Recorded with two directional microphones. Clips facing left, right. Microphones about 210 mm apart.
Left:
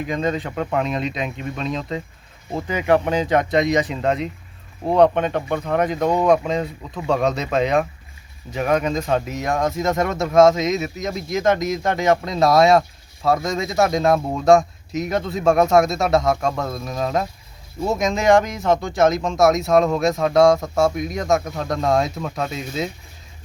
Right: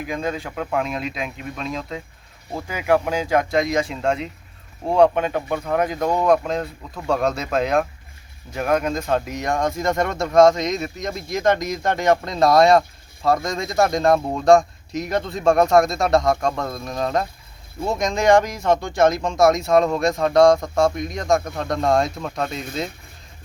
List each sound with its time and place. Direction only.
0.0 s speech: 5° right (ahead or behind)